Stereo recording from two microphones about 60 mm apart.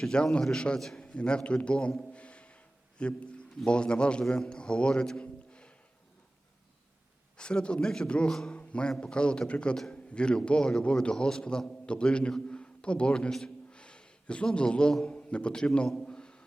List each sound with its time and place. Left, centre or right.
0.0 s a man's voice: centre
7.3 s a man's voice: centre
16.0 s a sound: centre